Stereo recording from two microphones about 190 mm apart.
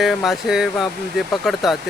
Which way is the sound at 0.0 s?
Centre (ahead or behind).